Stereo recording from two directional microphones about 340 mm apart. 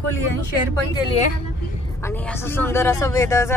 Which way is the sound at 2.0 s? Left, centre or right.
Centre.